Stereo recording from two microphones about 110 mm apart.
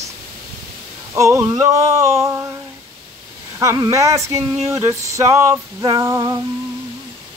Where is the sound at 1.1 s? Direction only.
25° right (ahead or behind).